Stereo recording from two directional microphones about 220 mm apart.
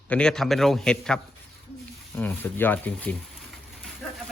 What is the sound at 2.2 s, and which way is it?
Speech, 10° left (ahead or behind).